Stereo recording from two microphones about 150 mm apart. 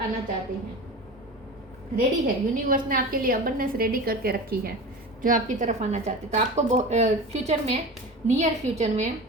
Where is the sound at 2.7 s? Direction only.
70° right (ahead or behind); by 4.7 s 90° right.